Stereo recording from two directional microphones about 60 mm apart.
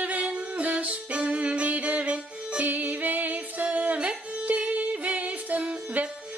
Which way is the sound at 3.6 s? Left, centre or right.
Right.